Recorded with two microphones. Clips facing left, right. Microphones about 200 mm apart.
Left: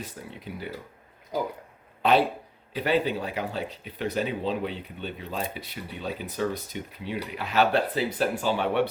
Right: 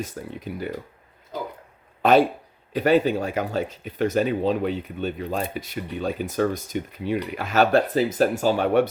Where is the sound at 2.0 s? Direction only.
45° right (ahead or behind).